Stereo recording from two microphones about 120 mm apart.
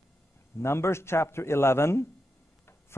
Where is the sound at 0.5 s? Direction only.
20° left (ahead or behind).